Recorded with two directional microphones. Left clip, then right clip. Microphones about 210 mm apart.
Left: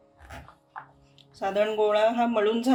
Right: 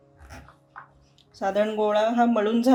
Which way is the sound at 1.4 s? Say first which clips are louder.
Right 1 dB; 25° right (ahead or behind).